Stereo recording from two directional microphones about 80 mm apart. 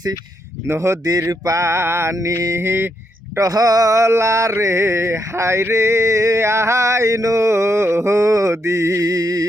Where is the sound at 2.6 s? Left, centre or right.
Right.